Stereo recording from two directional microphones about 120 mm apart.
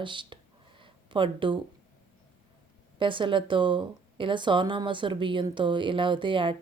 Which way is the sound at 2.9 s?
45° right (ahead or behind).